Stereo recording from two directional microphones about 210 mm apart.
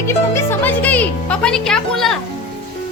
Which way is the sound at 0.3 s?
10° left (ahead or behind).